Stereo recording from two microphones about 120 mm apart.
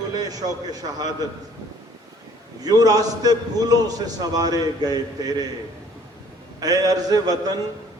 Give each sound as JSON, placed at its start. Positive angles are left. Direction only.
{"t": 0.1, "sound": "a man's voice", "side_deg": -30}
{"t": 2.6, "sound": "a man's voice", "side_deg": -30}
{"t": 6.6, "sound": "a man's voice", "side_deg": -30}